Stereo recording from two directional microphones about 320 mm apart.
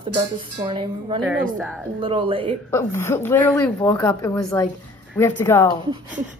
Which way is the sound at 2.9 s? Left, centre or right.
Centre.